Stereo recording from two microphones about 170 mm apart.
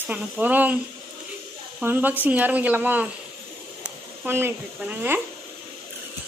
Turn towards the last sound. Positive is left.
turn(degrees=-10)  # may be behind; listen again after turning